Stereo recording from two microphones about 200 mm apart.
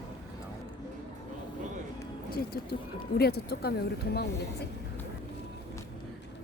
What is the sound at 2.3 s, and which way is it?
A woman's voice, 50° left (ahead or behind).